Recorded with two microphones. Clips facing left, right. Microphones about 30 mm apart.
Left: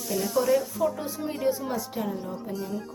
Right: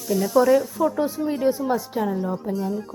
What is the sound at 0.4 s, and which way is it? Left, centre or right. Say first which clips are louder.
A woman's voice: right 5 dB; right.